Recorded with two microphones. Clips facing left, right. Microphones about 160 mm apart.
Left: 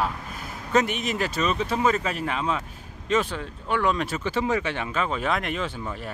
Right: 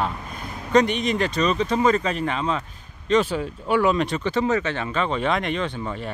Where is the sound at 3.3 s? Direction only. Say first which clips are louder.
Right 6 dB; 10° right (ahead or behind).